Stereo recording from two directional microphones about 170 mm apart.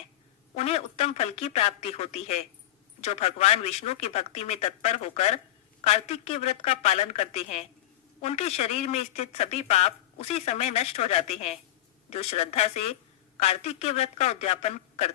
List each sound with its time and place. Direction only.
0.5 s speech: 40° left (ahead or behind)